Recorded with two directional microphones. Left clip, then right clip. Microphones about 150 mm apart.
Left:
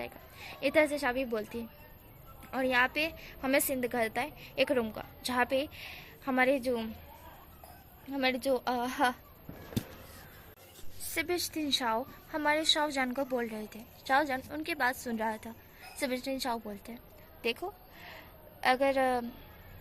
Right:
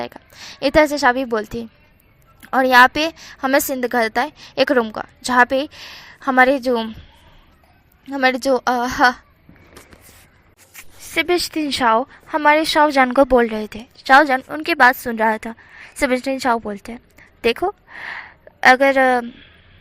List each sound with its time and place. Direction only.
0.0 s a woman's voice: 50° right (ahead or behind)
8.2 s a woman's voice: 45° right (ahead or behind)
11.1 s a woman's voice: 35° right (ahead or behind)